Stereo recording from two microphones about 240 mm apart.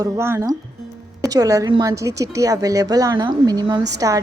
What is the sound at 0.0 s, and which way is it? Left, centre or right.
A woman's voice, centre.